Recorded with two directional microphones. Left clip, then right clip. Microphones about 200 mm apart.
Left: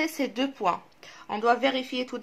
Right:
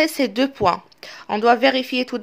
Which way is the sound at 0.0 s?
40° right (ahead or behind).